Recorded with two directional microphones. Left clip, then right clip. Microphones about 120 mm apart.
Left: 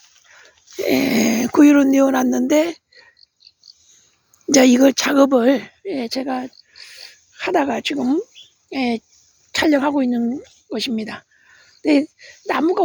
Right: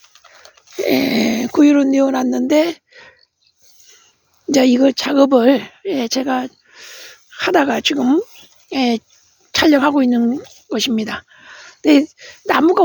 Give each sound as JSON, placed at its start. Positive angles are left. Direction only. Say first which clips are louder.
{"t": 0.8, "sound": "a sound", "louder": "right 2 dB", "side_deg": -15}
{"t": 1.0, "sound": "speech", "louder": "right 1 dB", "side_deg": 0}
{"t": 2.7, "sound": "a sound", "louder": "right 5 dB", "side_deg": -35}
{"t": 4.4, "sound": "speech", "louder": "even", "side_deg": 5}
{"t": 5.3, "sound": "speech", "louder": "right 3 dB", "side_deg": -20}
{"t": 5.6, "sound": "a child's voice", "louder": "right 5 dB", "side_deg": -40}
{"t": 9.5, "sound": "speech", "louder": "right 4 dB", "side_deg": -30}